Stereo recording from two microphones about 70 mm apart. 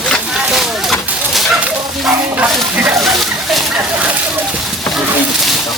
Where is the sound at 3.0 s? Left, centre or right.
Centre.